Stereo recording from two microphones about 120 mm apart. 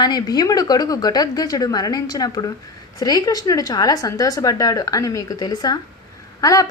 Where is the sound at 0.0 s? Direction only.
35° left (ahead or behind).